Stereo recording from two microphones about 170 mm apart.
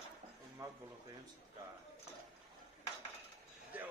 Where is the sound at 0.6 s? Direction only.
20° right (ahead or behind).